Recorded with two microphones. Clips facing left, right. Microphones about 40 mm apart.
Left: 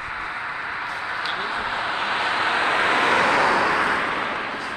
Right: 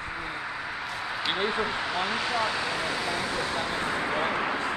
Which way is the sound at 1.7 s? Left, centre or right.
Left.